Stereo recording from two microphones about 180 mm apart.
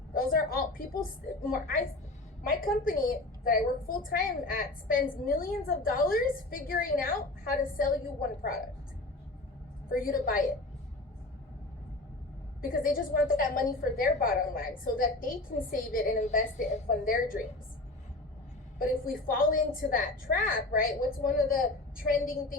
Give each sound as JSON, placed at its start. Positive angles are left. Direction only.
{"t": 0.1, "sound": "a woman's voice", "side_deg": 50}
{"t": 9.9, "sound": "a woman's voice", "side_deg": 55}
{"t": 12.6, "sound": "a woman's voice", "side_deg": 55}
{"t": 18.8, "sound": "a woman's voice", "side_deg": 55}